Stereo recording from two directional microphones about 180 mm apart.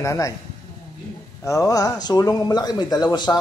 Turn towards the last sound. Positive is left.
turn(degrees=25)  # may be behind; listen again after turning